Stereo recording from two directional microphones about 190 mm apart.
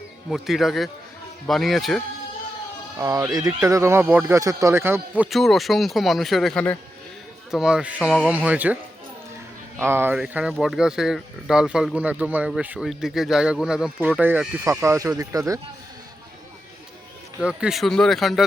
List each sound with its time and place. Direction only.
0.3 s speech: centre (ahead or behind)
3.0 s speech: 15° right (ahead or behind)
9.8 s speech: 10° right (ahead or behind)
17.4 s speech: 5° right (ahead or behind)